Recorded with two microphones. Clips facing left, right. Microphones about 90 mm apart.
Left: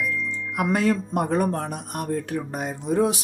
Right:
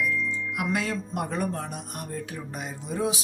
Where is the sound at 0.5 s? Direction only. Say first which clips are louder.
Left 8 dB; 45° left (ahead or behind).